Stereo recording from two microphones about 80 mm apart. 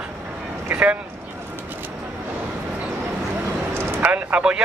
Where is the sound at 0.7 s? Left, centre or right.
Centre.